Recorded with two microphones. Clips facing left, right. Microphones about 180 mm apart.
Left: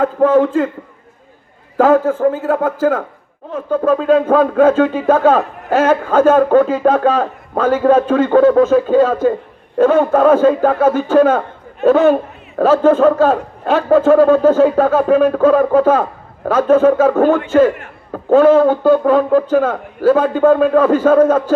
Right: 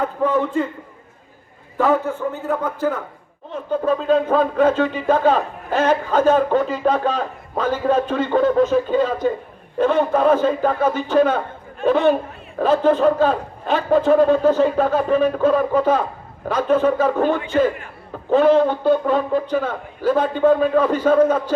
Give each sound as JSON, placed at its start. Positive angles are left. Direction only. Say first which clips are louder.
{"t": 0.0, "sound": "a man's voice", "louder": "left 8 dB", "side_deg": 90}
{"t": 1.8, "sound": "a man's voice", "louder": "left 7 dB", "side_deg": 90}
{"t": 3.5, "sound": "a man's voice", "louder": "left 5 dB", "side_deg": 50}